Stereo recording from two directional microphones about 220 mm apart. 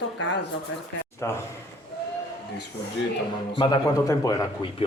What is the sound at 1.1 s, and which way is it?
Speech, 10° left (ahead or behind).